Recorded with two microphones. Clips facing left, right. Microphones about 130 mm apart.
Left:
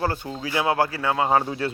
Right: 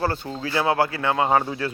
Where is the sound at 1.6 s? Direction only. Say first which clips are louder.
Left 1 dB; 25° left (ahead or behind).